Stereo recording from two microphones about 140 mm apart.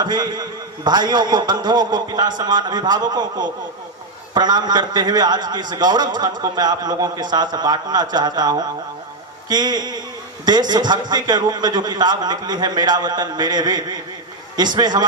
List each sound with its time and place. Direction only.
0.0 s a man's voice: 30° right (ahead or behind)